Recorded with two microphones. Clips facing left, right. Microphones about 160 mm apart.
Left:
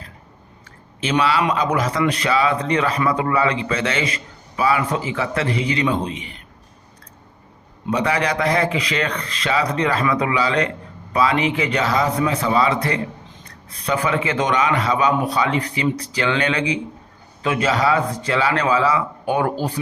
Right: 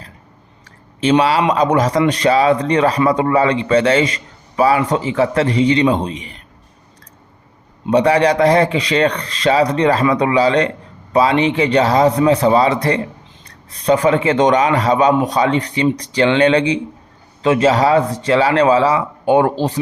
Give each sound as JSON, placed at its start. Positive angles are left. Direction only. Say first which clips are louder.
{"t": 0.6, "sound": "a man's voice", "louder": "right 9 dB", "side_deg": -35}
{"t": 7.9, "sound": "a man's voice", "louder": "right 8 dB", "side_deg": -35}